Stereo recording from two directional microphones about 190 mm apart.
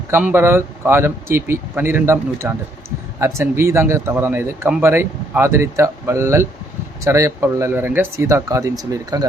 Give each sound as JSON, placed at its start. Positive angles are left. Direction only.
{"t": 0.1, "sound": "speech", "side_deg": -10}